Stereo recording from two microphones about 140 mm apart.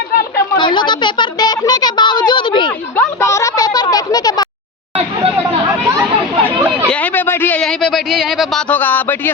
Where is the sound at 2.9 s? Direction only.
20° left (ahead or behind).